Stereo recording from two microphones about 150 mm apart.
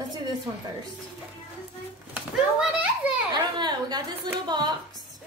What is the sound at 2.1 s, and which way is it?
Speech, 10° right (ahead or behind).